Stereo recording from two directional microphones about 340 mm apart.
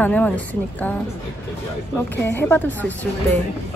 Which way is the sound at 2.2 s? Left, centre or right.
Centre.